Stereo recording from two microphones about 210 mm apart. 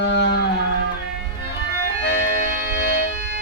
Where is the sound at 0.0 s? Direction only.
55° left (ahead or behind).